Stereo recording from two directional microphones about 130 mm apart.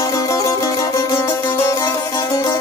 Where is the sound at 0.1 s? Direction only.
25° left (ahead or behind).